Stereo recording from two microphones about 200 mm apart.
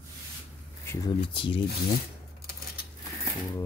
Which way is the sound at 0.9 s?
20° left (ahead or behind).